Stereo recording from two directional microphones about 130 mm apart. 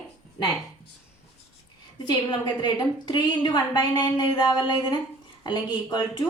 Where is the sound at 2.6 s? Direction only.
35° left (ahead or behind).